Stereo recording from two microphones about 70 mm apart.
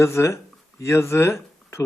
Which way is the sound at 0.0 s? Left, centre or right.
Left.